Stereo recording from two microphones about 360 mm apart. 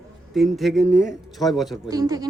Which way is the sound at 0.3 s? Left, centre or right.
Centre.